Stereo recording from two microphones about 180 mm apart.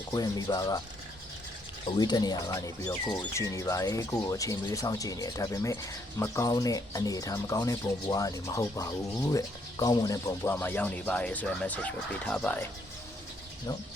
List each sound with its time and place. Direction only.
0.1 s speech: 20° left (ahead or behind)
2.0 s speech: 25° left (ahead or behind); by 12.6 s 5° left (ahead or behind)